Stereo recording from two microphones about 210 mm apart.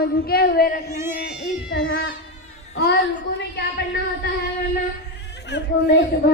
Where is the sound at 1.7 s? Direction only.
50° left (ahead or behind).